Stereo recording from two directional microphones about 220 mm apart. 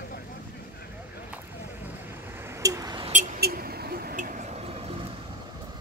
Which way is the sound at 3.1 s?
45° right (ahead or behind).